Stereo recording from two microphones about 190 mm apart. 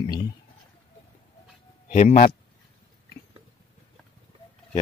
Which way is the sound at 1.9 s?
40° left (ahead or behind).